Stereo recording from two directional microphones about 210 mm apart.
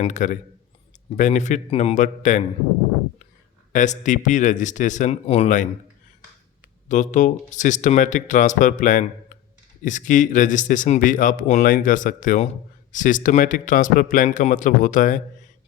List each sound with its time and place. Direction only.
0.0 s speech: 35° left (ahead or behind)
3.7 s speech: 35° left (ahead or behind)
6.8 s speech: 35° left (ahead or behind)